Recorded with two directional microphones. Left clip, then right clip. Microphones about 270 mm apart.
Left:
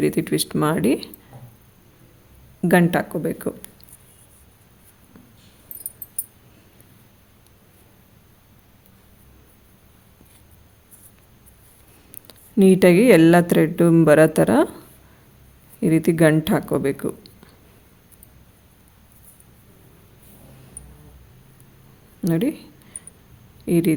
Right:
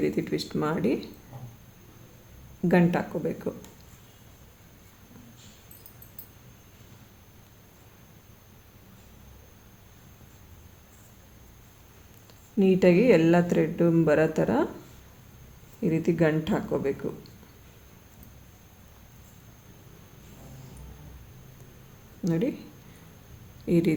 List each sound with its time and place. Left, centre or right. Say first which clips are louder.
0.0 s speech: left 7 dB; left
2.6 s speech: left 6 dB; left
12.3 s speech: left 8 dB; left
15.8 s speech: left 8 dB; left
22.2 s speech: left 6 dB; left
23.6 s speech: left 5 dB; left